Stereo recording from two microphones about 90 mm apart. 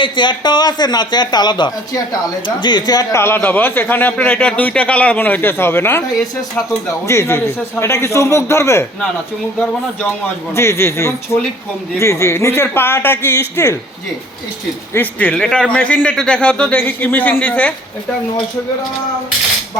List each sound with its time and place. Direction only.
0.0 s speech: 60° left (ahead or behind)
3.1 s a man's voice: 30° left (ahead or behind)
10.5 s a man's voice: 30° left (ahead or behind)
14.9 s a man's voice: 20° left (ahead or behind)
15.4 s a man's voice: 10° left (ahead or behind)